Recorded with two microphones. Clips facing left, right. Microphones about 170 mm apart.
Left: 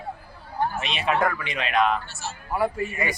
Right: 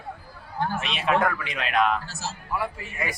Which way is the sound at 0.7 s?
Centre (ahead or behind).